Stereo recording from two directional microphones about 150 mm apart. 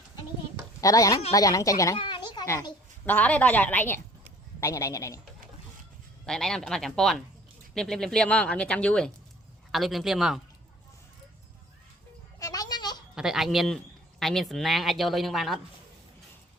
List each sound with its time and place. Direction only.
0.8 s speech: 20° left (ahead or behind)
2.0 s a sound: 30° left (ahead or behind)
2.5 s speech: 25° left (ahead or behind)
3.1 s a woman's voice: 10° left (ahead or behind)
6.2 s speech: 5° left (ahead or behind)
12.4 s a sound: 25° left (ahead or behind)
13.1 s speech: 5° right (ahead or behind)